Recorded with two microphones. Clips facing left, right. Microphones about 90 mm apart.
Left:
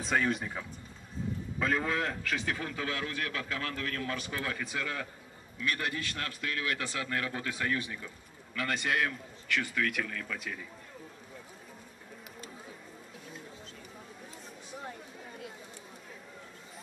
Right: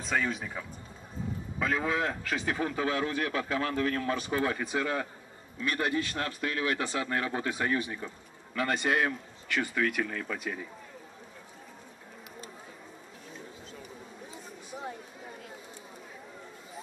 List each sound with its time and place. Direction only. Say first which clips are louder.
0.0 s a man's voice: left 1 dB; centre (ahead or behind)
2.5 s speech: right 6 dB; 20° right (ahead or behind)
14.3 s a sound: right 3 dB; 5° right (ahead or behind)